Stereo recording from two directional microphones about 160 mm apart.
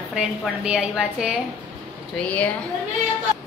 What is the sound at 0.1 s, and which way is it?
A woman's voice, 5° right (ahead or behind).